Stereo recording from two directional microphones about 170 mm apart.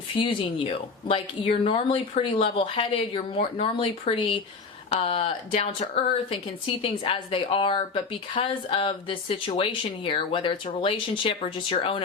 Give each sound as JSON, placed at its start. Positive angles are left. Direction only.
{"t": 0.2, "sound": "speech", "side_deg": 30}